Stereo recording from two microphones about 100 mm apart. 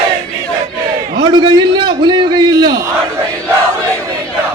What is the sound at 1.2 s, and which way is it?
A man's voice, 50° right (ahead or behind).